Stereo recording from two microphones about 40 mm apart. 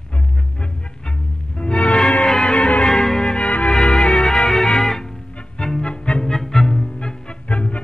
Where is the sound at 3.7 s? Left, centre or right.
Centre.